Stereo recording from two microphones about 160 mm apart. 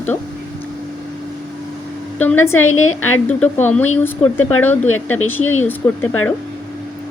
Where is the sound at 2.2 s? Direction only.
10° left (ahead or behind).